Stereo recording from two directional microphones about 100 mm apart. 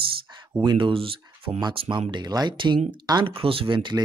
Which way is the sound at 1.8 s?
60° right (ahead or behind).